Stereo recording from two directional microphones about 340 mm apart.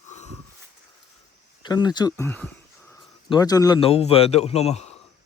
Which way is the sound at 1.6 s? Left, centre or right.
Centre.